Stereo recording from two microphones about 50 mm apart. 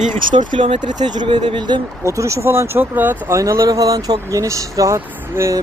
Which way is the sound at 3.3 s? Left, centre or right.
Right.